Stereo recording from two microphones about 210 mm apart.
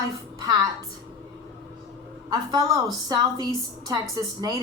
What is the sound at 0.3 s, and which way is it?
Speech, 15° right (ahead or behind).